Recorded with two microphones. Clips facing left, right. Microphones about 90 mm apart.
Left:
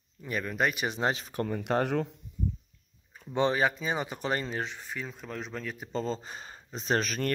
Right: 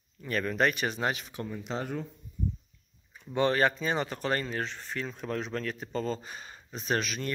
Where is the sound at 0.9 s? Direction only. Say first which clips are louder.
Left 2 dB; 30° left (ahead or behind).